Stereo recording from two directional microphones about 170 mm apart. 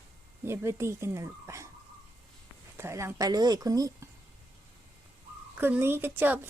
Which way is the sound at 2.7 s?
15° right (ahead or behind).